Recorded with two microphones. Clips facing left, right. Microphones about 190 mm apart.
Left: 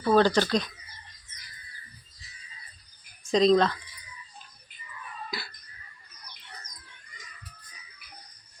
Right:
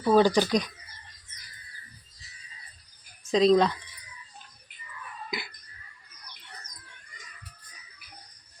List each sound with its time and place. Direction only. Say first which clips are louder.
0.0 s speech: right 1 dB; 10° right (ahead or behind)
3.2 s speech: even; 5° right (ahead or behind)
5.3 s music: right 4 dB; 15° right (ahead or behind)